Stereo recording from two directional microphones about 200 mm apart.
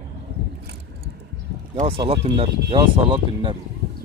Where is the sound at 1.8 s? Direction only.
30° right (ahead or behind).